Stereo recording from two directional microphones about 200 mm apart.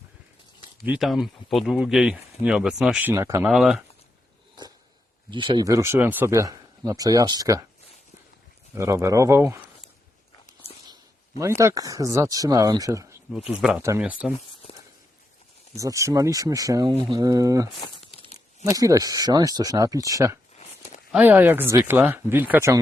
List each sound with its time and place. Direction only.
0.9 s speech: centre (ahead or behind)
3.5 s speech: centre (ahead or behind)
5.3 s speech: 25° right (ahead or behind)
8.7 s speech: 15° right (ahead or behind)
11.3 s speech: 15° right (ahead or behind)
15.7 s speech: 15° right (ahead or behind)
17.7 s crumpling: 25° left (ahead or behind)
18.6 s speech: 15° right (ahead or behind)